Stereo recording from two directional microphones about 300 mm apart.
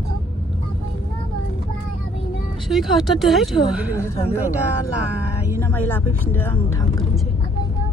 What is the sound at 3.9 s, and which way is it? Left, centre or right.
Speech, centre.